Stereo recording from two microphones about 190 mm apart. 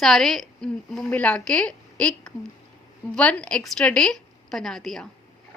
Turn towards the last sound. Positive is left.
turn(degrees=0)  # may be behind; listen again after turning